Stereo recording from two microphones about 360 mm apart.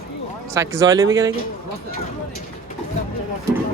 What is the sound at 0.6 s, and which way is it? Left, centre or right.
Speech, centre.